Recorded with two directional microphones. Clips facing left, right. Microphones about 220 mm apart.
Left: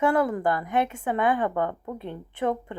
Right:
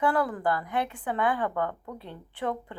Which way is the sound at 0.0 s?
20° left (ahead or behind).